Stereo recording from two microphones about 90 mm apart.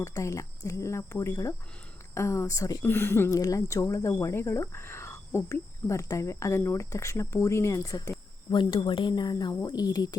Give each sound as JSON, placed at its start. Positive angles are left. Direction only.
{"t": 0.0, "sound": "a woman's voice", "side_deg": 35}
{"t": 8.4, "sound": "speech", "side_deg": 60}
{"t": 9.1, "sound": "speech", "side_deg": 50}